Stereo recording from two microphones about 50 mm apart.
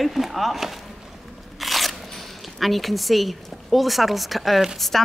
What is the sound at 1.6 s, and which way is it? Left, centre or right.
Crunch, centre.